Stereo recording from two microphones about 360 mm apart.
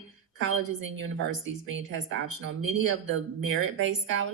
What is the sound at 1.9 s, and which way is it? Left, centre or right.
Speech, right.